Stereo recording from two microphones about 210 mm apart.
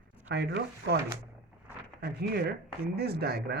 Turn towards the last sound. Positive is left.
turn(degrees=-50)  # may be behind; listen again after turning